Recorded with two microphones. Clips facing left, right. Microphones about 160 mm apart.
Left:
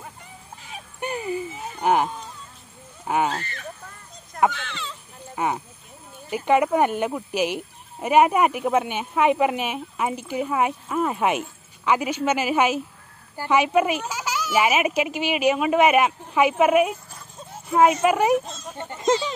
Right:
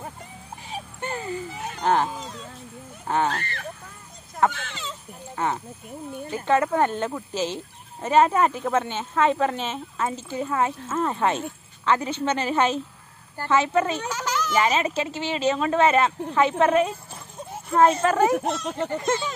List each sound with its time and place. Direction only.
1.0 s a sound: 15° left (ahead or behind)
1.5 s a sound: 75° right (ahead or behind)
1.8 s speech: 10° left (ahead or behind)
2.2 s sheep: 90° right
3.1 s speech: 10° left (ahead or behind)
4.6 s speech: 45° right (ahead or behind)
5.3 s speech: 10° left (ahead or behind)
18.4 s speech: 70° right (ahead or behind)
18.9 s speech: 20° left (ahead or behind)